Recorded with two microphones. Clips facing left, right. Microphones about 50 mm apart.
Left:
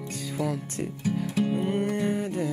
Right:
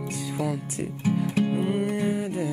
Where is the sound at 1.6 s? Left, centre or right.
Centre.